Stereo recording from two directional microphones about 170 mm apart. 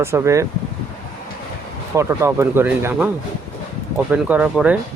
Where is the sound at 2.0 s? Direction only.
15° right (ahead or behind).